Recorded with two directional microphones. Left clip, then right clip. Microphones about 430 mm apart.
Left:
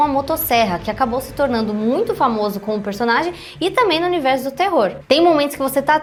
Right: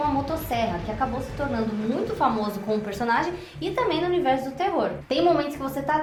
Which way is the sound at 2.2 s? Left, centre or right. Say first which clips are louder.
Left 6 dB; left.